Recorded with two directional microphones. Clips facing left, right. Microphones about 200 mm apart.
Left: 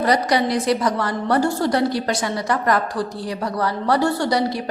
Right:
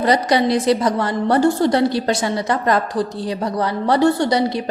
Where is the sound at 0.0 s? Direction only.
25° right (ahead or behind).